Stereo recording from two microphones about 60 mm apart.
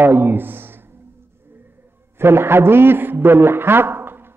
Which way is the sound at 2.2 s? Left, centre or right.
Right.